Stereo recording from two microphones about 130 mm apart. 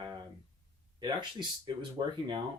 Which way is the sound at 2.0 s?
35° right (ahead or behind).